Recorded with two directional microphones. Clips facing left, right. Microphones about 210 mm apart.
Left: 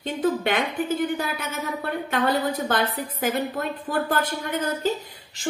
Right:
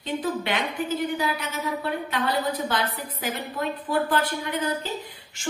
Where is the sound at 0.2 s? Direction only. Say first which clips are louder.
Left 8 dB; 50° left (ahead or behind).